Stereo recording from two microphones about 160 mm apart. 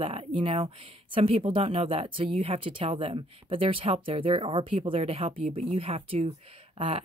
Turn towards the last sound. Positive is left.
turn(degrees=-35)  # may be behind; listen again after turning